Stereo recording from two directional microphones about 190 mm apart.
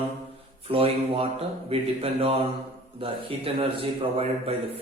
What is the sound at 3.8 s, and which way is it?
Speech, 30° right (ahead or behind).